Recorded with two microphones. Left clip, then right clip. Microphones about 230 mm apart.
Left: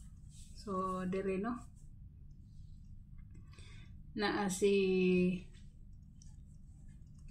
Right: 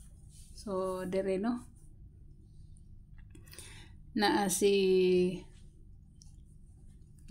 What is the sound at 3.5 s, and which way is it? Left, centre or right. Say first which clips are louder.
Speech: right 8 dB; right.